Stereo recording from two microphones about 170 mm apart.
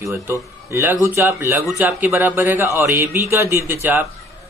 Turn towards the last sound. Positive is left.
turn(degrees=-10)  # may be behind; listen again after turning